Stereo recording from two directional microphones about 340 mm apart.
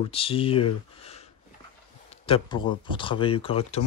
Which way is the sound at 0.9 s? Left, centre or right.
Centre.